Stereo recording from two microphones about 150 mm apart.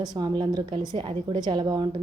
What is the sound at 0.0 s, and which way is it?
A woman's voice, 30° right (ahead or behind).